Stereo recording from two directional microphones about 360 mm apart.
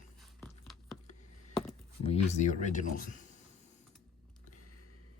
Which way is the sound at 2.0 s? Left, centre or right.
Centre.